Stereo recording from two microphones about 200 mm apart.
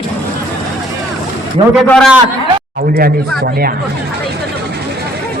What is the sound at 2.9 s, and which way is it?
Speech, 50° right (ahead or behind).